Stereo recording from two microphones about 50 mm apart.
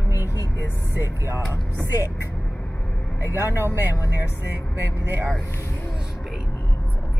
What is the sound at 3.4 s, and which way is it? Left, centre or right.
Speech, right.